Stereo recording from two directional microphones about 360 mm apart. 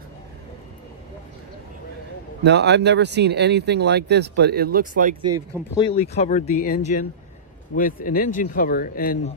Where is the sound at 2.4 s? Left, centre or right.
Right.